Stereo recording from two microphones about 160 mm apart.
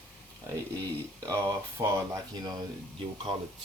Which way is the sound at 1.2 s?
20° right (ahead or behind).